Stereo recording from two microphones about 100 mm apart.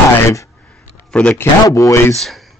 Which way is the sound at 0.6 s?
10° left (ahead or behind).